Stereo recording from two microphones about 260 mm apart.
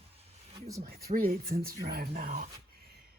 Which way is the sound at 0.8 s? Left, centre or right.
Right.